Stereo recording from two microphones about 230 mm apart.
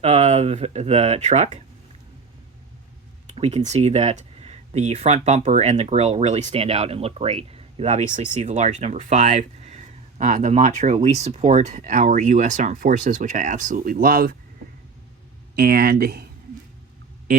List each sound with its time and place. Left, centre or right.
0.0 s speech: right
3.2 s speech: right
15.5 s speech: right